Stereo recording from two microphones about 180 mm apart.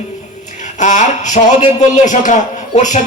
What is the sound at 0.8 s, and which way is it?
A man's voice, 40° left (ahead or behind).